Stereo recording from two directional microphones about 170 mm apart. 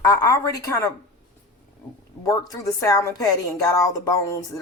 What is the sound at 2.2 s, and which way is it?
A woman's voice, 20° left (ahead or behind).